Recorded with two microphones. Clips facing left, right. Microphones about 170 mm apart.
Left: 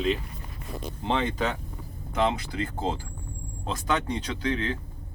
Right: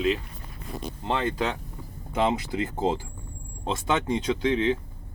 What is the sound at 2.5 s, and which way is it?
Speech, 20° right (ahead or behind).